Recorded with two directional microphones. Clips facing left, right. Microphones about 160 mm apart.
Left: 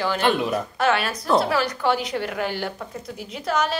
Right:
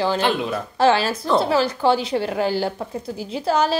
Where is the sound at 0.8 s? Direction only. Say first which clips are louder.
Right 6 dB; 30° right (ahead or behind).